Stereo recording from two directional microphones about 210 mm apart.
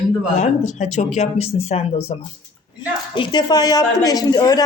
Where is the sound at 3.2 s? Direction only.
20° left (ahead or behind).